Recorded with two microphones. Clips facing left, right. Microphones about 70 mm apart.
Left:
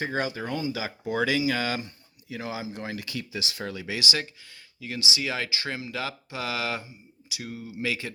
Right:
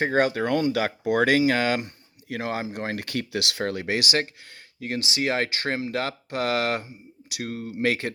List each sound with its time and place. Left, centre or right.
0.0 s speech: right